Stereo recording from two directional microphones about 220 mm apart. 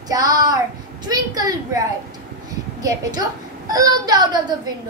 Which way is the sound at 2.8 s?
15° right (ahead or behind).